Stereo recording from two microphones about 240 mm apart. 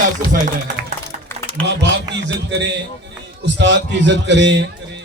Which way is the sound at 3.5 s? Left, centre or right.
Right.